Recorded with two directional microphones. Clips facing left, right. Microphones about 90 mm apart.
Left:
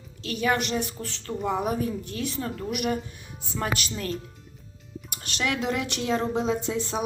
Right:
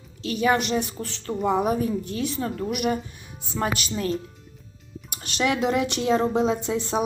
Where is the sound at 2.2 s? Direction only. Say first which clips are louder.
Right 1 dB; 5° right (ahead or behind).